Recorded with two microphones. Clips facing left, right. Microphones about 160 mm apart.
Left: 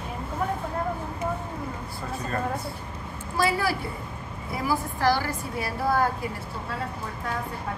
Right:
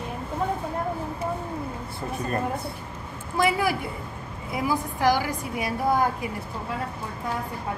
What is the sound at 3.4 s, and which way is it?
A man's voice, 20° right (ahead or behind).